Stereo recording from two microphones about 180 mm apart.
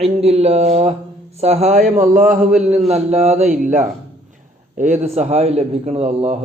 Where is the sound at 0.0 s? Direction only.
35° right (ahead or behind).